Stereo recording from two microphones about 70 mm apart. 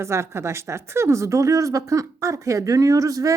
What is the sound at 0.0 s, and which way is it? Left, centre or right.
Speech, right.